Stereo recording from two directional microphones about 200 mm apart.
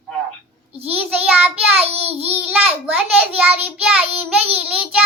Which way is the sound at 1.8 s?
30° right (ahead or behind).